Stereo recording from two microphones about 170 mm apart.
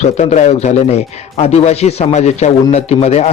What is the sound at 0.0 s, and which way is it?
A man's voice, 40° left (ahead or behind).